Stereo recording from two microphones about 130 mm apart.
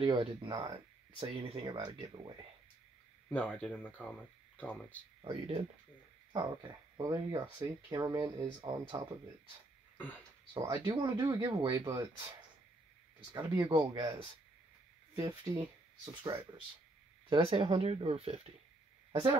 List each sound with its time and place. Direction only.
0.0 s speech: 40° right (ahead or behind)
1.2 s speech: 45° right (ahead or behind)
3.3 s speech: 10° left (ahead or behind)
5.2 s speech: 40° right (ahead or behind)
9.9 s speech: 10° left (ahead or behind)
10.6 s speech: 25° right (ahead or behind)
13.7 s speech: 35° right (ahead or behind)
15.1 s speech: 25° right (ahead or behind); by 18.5 s 50° right (ahead or behind)